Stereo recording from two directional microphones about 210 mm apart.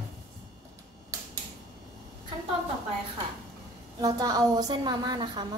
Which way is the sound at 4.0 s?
20° right (ahead or behind).